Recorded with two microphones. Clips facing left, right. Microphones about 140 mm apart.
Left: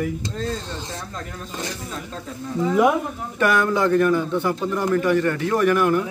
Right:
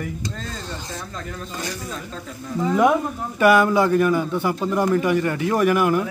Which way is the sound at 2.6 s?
5° left (ahead or behind).